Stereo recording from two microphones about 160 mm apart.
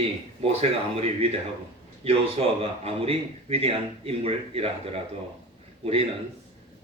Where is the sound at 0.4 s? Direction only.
40° right (ahead or behind).